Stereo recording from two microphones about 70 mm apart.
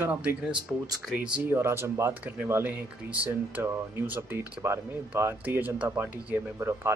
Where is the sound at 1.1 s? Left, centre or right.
Centre.